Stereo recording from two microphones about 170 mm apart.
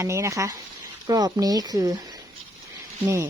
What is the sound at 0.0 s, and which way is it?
A woman's voice, 15° right (ahead or behind).